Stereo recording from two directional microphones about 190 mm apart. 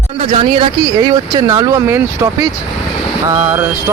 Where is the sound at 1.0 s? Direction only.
20° right (ahead or behind).